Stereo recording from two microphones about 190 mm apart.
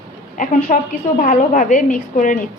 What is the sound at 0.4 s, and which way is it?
A woman's voice, 45° left (ahead or behind).